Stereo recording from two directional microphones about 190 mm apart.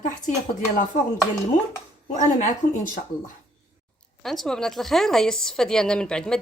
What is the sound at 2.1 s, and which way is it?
Speech, 40° left (ahead or behind).